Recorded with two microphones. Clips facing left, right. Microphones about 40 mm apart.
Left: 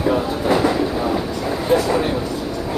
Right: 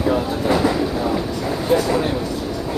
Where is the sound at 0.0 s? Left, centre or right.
Centre.